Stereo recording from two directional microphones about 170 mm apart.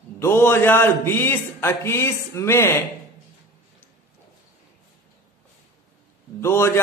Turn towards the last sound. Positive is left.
turn(degrees=15)  # may be behind; listen again after turning